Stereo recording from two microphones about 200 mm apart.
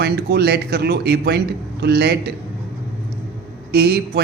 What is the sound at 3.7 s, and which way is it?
Speech, 55° right (ahead or behind).